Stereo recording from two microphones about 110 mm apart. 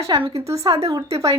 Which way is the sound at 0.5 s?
30° right (ahead or behind).